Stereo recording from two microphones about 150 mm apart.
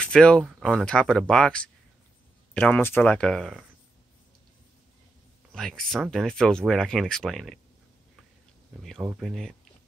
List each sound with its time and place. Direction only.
0.0 s speech: 5° left (ahead or behind)
5.5 s speech: 5° left (ahead or behind)
9.1 s speech: centre (ahead or behind)